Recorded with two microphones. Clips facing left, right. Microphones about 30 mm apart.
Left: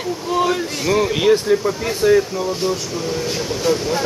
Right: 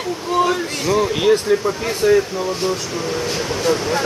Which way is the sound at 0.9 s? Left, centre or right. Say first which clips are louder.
Even; centre.